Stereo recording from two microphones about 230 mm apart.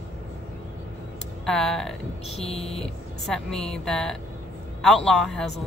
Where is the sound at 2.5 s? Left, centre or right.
Left.